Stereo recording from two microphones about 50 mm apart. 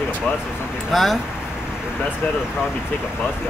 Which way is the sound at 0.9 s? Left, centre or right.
Centre.